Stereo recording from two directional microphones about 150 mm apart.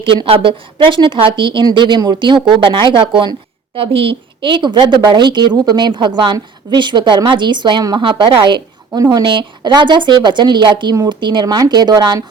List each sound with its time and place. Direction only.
0.0 s speech: 35° right (ahead or behind)